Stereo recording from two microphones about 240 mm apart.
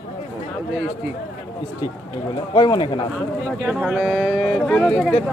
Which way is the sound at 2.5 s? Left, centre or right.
Centre.